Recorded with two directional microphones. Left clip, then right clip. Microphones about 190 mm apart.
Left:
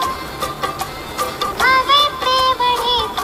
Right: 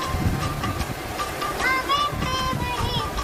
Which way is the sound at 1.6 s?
40° left (ahead or behind).